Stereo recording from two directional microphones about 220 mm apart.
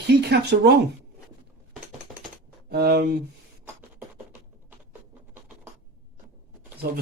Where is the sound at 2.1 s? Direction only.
Centre (ahead or behind).